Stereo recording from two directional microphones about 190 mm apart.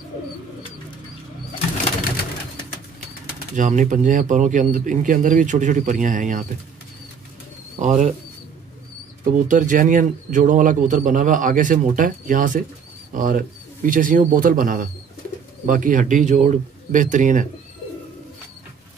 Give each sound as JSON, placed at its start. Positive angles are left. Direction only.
{"t": 3.5, "sound": "speech", "side_deg": -40}
{"t": 7.8, "sound": "a man's voice", "side_deg": -40}
{"t": 9.2, "sound": "a man's voice", "side_deg": -40}